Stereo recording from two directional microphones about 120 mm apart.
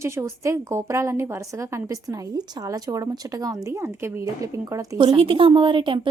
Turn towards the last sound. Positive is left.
turn(degrees=-45)  # may be behind; listen again after turning